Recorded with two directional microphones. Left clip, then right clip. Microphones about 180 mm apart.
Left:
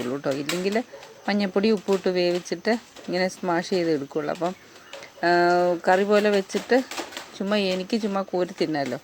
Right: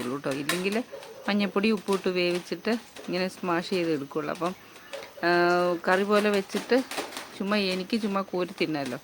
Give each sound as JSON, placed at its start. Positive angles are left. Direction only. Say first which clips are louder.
{"t": 0.1, "sound": "speech", "louder": "left 2 dB", "side_deg": 10}